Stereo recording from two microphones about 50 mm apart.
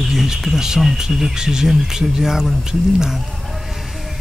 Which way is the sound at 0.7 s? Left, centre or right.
Centre.